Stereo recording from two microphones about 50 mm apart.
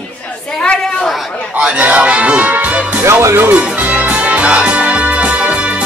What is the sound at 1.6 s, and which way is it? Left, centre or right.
Speech, right.